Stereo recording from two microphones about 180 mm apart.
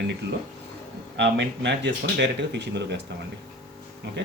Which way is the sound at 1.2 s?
80° right.